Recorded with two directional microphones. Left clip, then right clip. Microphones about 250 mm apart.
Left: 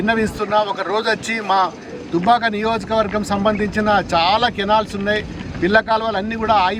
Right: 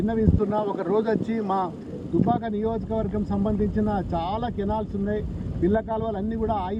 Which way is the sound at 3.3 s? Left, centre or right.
Left.